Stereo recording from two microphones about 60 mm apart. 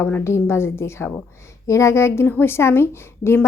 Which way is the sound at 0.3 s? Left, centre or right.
Left.